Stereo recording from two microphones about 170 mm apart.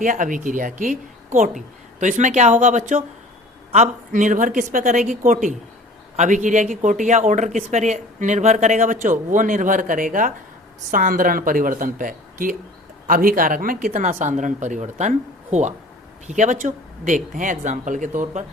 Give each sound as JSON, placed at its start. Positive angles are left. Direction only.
{"t": 0.0, "sound": "speech", "side_deg": -50}